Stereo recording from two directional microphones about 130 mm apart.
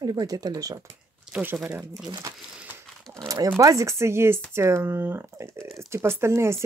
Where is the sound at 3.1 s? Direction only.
25° right (ahead or behind).